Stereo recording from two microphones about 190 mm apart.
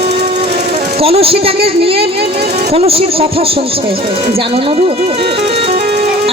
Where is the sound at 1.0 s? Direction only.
30° right (ahead or behind).